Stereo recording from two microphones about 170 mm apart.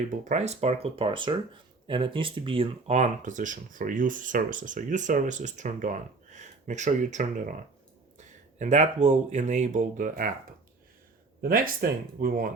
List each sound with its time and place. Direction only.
0.3 s speech: 40° right (ahead or behind)
11.4 s speech: 60° right (ahead or behind)